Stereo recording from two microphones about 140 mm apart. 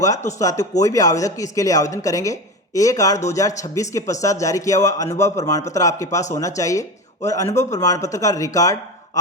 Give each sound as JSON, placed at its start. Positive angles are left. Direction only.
{"t": 0.3, "sound": "speech", "side_deg": 25}